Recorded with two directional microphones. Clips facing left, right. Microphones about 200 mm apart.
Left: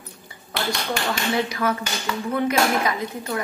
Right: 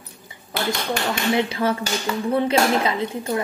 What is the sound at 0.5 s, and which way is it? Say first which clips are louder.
Speech: right 2 dB; 20° right (ahead or behind).